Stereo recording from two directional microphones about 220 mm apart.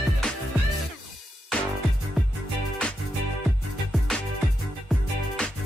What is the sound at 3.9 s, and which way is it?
Music, centre (ahead or behind).